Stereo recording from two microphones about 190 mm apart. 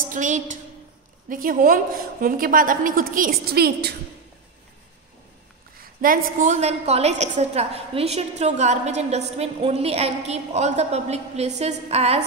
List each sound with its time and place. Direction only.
0.1 s a woman's voice: 40° right (ahead or behind)
5.9 s a woman's voice: 50° right (ahead or behind)